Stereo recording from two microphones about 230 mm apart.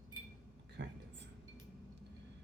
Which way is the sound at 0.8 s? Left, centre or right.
Right.